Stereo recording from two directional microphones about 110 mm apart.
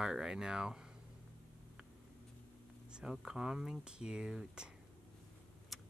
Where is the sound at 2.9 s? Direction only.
5° right (ahead or behind).